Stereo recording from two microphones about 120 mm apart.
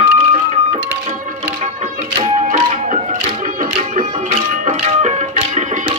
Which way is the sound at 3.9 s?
70° right (ahead or behind).